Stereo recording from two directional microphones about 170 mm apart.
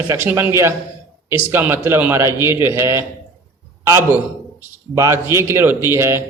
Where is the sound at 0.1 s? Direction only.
15° right (ahead or behind).